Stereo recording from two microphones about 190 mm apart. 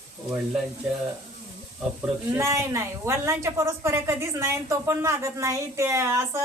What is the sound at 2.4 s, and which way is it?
A woman's voice, 15° right (ahead or behind).